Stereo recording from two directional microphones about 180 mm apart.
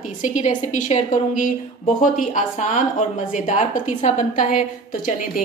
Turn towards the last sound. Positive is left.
turn(degrees=45)  # may be behind; listen again after turning